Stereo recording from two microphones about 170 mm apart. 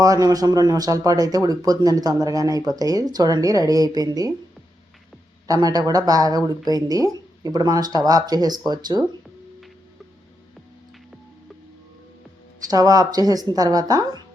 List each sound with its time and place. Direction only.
0.0 s speech: 20° right (ahead or behind)
5.5 s speech: 20° right (ahead or behind)
12.7 s speech: 20° right (ahead or behind)